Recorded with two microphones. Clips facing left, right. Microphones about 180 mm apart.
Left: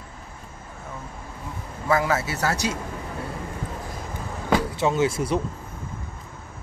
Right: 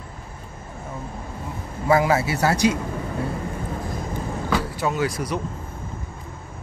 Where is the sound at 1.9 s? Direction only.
15° right (ahead or behind).